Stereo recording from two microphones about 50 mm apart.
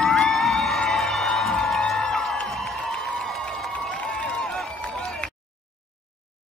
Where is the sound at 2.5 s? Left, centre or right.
Centre.